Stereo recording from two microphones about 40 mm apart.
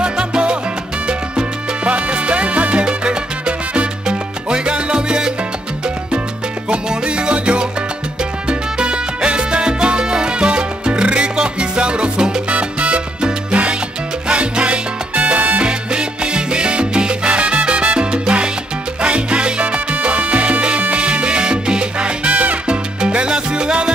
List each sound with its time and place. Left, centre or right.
0.0 s salsa music: right
1.9 s salsa music: right
6.7 s music: right
8.5 s salsa music: right